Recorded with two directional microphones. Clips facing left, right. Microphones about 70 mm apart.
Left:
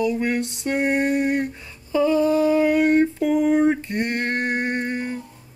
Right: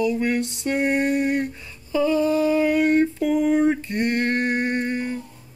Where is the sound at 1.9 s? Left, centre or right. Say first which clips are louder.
Left 2 dB; left.